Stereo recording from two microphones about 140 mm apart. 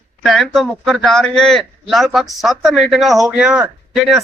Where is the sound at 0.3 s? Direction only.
Centre (ahead or behind).